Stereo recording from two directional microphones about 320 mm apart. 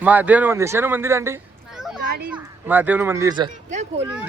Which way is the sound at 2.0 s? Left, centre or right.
Right.